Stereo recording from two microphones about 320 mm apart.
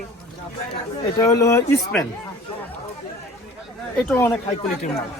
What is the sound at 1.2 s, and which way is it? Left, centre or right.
Speech, centre.